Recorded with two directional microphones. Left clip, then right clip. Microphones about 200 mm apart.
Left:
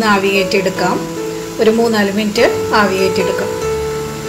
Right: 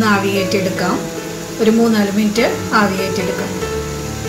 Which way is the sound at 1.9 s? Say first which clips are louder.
Left 2 dB; 35° left (ahead or behind).